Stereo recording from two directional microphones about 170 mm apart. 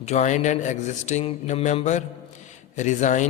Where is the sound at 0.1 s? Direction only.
45° left (ahead or behind).